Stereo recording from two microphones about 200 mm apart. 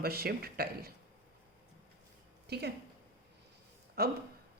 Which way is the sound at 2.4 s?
55° right (ahead or behind).